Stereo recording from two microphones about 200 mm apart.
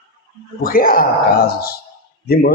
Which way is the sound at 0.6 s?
45° left (ahead or behind).